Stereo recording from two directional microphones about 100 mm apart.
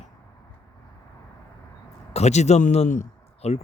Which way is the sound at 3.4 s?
90° left.